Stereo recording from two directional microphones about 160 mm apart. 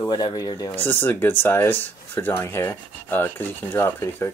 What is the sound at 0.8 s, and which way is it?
Speech, 15° left (ahead or behind).